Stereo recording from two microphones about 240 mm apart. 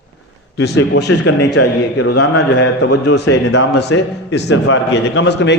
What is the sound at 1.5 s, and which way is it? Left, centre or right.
Speech, left.